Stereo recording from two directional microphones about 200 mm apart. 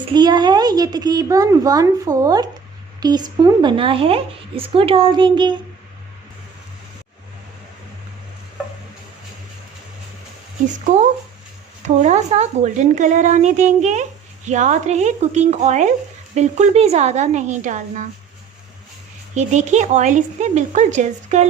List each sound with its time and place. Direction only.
0.1 s a woman's voice: 20° right (ahead or behind)
10.8 s speech: 40° right (ahead or behind)
19.3 s speech: 35° right (ahead or behind)